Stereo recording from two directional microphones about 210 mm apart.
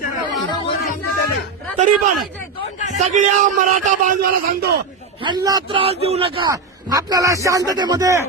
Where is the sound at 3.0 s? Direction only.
35° right (ahead or behind).